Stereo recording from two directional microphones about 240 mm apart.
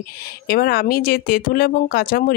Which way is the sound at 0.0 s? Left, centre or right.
Left.